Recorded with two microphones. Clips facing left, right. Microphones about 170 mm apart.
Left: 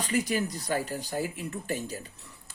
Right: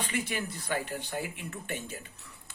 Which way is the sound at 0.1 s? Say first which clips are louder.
Left 6 dB; 40° left (ahead or behind).